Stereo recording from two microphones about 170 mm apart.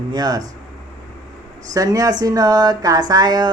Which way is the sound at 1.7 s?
20° right (ahead or behind).